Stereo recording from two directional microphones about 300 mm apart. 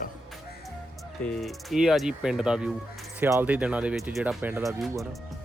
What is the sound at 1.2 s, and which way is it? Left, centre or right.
Speech, centre.